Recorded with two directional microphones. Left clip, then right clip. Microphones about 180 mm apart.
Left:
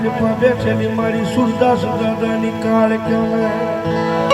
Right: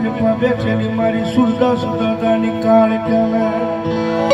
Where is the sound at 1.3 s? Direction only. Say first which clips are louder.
Left 1 dB; 45° left (ahead or behind).